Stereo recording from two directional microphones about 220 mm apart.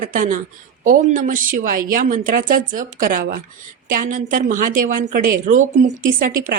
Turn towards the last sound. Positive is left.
turn(degrees=-40)  # may be behind; listen again after turning